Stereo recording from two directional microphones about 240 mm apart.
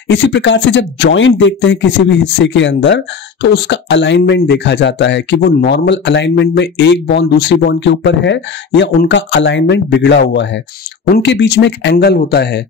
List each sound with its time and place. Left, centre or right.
0.1 s speech: left